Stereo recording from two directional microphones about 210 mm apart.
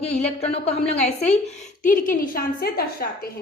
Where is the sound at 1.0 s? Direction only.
5° left (ahead or behind).